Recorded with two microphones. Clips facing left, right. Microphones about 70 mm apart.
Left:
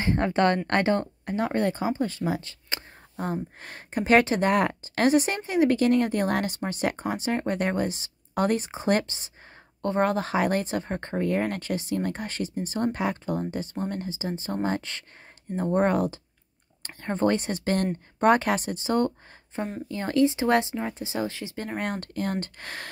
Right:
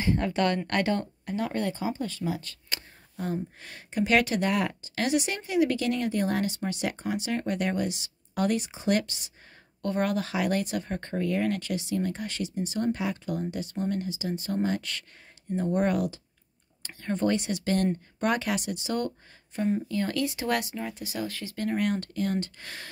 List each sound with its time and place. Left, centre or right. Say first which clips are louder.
0.0 s a woman's voice: left 3 dB; left
3.2 s speech: left 2 dB; left
4.5 s speech: left 5 dB; left
11.2 s speech: left 1 dB; left
13.2 s speech: left 2 dB; left
21.7 s speech: right 1 dB; left